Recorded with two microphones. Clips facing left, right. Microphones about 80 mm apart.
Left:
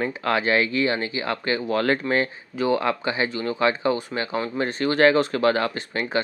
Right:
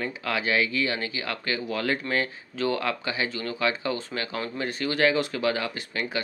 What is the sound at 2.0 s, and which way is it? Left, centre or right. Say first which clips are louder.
Speech: left 5 dB; centre.